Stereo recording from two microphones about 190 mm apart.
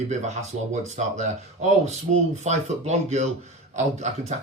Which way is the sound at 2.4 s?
35° right (ahead or behind).